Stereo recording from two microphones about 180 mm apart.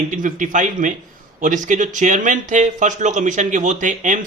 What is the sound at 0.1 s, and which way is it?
Speech, 45° right (ahead or behind).